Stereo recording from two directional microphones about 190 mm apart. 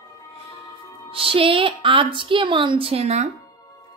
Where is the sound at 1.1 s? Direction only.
30° right (ahead or behind).